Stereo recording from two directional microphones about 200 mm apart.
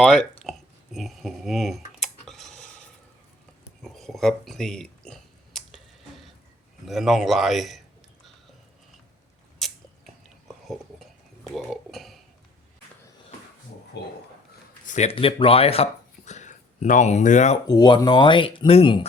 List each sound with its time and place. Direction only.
0.5 s a sound: centre (ahead or behind)
0.9 s computer keyboard: centre (ahead or behind)
3.8 s speech: centre (ahead or behind)
6.8 s a man's voice: centre (ahead or behind)
9.6 s a sound: centre (ahead or behind)
11.5 s speech: centre (ahead or behind)
14.0 s speech: 60° left (ahead or behind)
14.8 s speech: 35° left (ahead or behind)
17.7 s speech: 20° left (ahead or behind)